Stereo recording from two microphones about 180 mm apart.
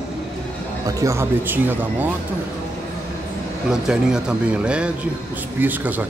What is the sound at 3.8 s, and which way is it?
Speech, 5° right (ahead or behind).